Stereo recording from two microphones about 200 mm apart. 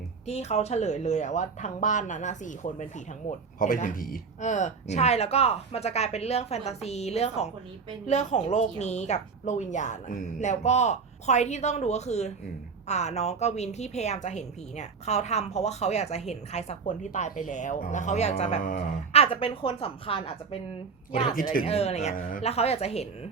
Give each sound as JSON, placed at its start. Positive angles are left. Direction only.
{"t": 0.3, "sound": "speech", "side_deg": 35}
{"t": 19.1, "sound": "a woman's voice", "side_deg": 30}
{"t": 21.3, "sound": "speech", "side_deg": 45}
{"t": 21.6, "sound": "speech", "side_deg": 30}